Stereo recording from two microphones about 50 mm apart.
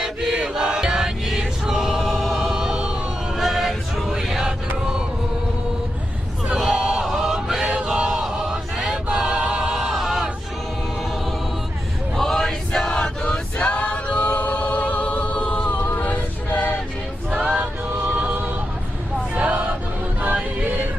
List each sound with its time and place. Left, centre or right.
0.0 s choir: centre
6.6 s chant: centre
7.7 s a sound: centre
8.1 s choir: centre
12.1 s choir: centre
12.9 s choir: centre
16.0 s a capella: left
17.6 s music: right
19.3 s a sound: right
20.2 s music: right